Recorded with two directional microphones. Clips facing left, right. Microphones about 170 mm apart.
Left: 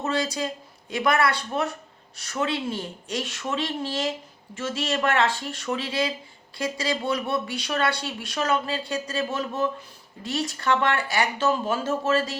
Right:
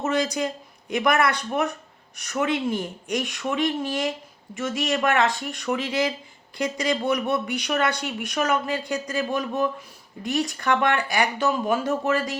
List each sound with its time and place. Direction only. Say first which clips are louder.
0.0 s speech: right 3 dB; 20° right (ahead or behind)